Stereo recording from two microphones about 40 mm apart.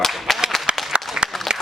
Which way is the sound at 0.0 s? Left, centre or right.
Centre.